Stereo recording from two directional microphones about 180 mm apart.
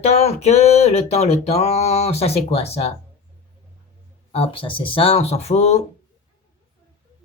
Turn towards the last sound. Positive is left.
turn(degrees=35)  # may be behind; listen again after turning